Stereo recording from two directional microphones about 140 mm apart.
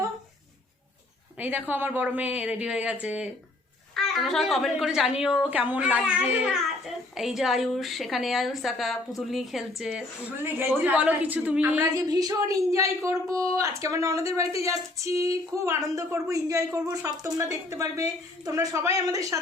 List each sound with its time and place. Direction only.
1.4 s a woman's voice: 10° right (ahead or behind)
11.9 s a woman's voice: 25° right (ahead or behind)